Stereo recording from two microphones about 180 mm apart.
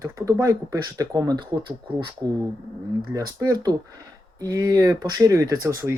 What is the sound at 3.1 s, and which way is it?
Speech, 20° right (ahead or behind).